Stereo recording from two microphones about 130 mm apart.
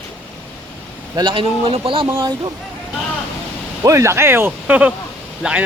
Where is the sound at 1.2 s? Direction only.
40° right (ahead or behind).